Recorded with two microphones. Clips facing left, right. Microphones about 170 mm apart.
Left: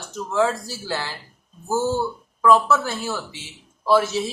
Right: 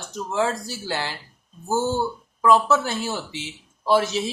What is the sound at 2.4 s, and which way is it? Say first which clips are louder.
Speech: left 1 dB; 20° right (ahead or behind).